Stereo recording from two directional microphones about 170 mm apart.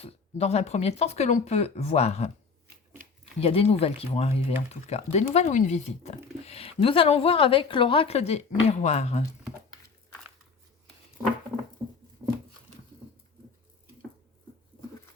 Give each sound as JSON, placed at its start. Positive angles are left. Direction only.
{"t": 0.0, "sound": "speech", "side_deg": 40}
{"t": 3.4, "sound": "speech", "side_deg": 35}